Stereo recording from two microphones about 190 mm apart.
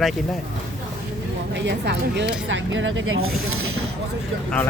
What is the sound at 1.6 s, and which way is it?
Speech, 65° right (ahead or behind).